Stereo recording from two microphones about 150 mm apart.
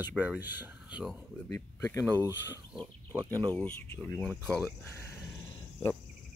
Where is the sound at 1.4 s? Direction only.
15° left (ahead or behind).